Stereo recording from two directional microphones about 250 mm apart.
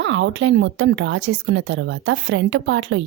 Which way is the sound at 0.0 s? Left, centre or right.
Right.